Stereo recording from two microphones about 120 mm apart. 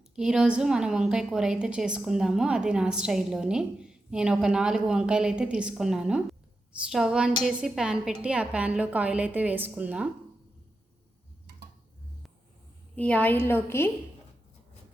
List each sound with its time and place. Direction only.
0.2 s a woman's voice: 5° right (ahead or behind)
13.0 s a woman's voice: 10° left (ahead or behind)